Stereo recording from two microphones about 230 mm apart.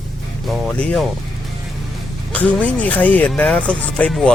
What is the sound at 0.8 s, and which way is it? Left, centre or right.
Speech, centre.